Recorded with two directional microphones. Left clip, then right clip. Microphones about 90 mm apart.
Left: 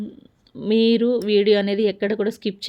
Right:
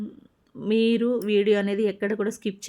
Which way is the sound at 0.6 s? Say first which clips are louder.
Left 4 dB; 30° left (ahead or behind).